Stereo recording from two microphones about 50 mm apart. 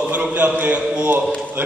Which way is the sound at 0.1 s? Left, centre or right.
Right.